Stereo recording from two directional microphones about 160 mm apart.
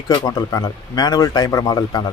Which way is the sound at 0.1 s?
25° left (ahead or behind).